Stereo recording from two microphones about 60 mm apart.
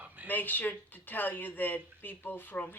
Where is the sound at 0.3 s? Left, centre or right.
Left.